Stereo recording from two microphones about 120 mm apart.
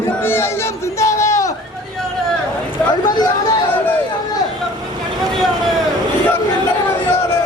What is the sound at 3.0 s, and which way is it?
Chatter, 35° left (ahead or behind).